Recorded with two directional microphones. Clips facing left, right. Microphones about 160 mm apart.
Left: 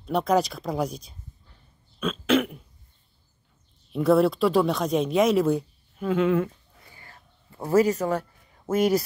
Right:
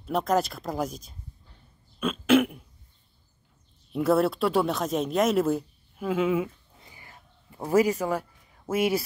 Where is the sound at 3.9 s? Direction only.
Centre (ahead or behind).